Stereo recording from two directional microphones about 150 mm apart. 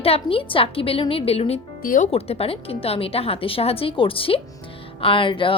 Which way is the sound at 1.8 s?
65° left (ahead or behind).